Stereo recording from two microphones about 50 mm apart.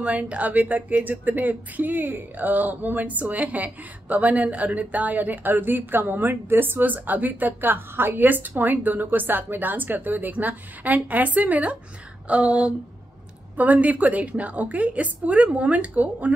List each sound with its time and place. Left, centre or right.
0.0 s speech: right